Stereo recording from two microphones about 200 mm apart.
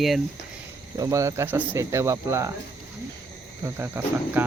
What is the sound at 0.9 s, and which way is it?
Speech, 15° right (ahead or behind).